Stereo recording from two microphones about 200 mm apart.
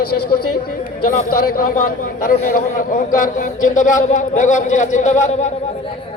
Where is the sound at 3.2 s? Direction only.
40° left (ahead or behind).